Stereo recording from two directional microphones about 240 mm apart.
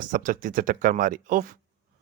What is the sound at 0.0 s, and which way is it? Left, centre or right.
Speech, right.